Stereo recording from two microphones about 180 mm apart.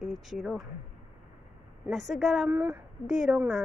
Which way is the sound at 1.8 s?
Centre (ahead or behind).